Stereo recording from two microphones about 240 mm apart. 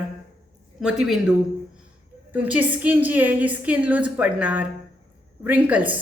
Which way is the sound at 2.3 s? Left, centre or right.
Centre.